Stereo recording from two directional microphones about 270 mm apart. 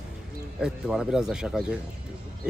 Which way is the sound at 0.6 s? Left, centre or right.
Centre.